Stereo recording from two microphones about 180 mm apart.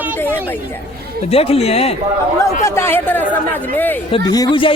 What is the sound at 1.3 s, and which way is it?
Speech, 35° left (ahead or behind).